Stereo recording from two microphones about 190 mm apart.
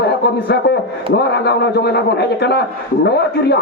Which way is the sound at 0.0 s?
60° left (ahead or behind).